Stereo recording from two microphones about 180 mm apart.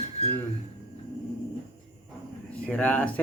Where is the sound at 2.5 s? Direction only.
5° left (ahead or behind).